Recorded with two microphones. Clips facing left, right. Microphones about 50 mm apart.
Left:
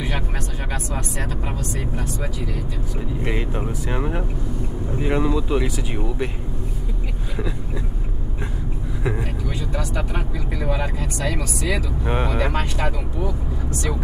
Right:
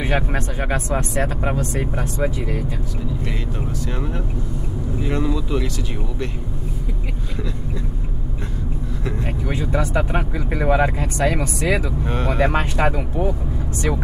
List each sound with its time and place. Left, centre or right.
0.0 s speech: right
3.3 s speech: left
9.5 s speech: right
12.0 s speech: centre
12.5 s speech: right